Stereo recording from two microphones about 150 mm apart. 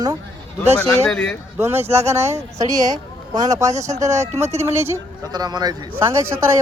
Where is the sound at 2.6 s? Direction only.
55° right (ahead or behind).